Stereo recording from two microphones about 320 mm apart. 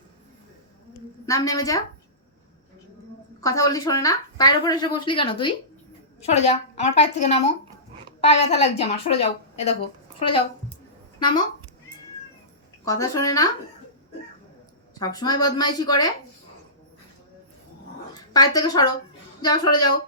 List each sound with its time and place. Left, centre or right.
1.3 s speech: centre
3.4 s a woman's voice: centre
12.8 s speech: centre
14.9 s speech: centre
18.3 s speech: centre